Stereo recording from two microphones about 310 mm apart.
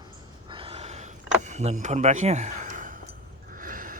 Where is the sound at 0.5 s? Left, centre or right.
Centre.